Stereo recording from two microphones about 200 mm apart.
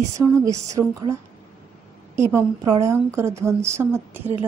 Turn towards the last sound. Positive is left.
turn(degrees=-10)  # may be behind; listen again after turning